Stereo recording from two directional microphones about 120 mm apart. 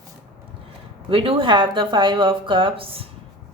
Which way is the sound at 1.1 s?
50° right (ahead or behind).